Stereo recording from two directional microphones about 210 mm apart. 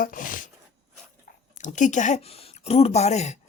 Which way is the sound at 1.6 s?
35° left (ahead or behind).